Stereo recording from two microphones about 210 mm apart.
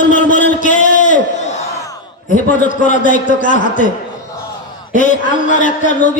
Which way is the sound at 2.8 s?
35° left (ahead or behind).